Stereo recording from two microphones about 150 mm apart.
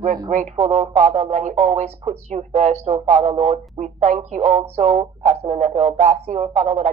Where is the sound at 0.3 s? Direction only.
50° right (ahead or behind).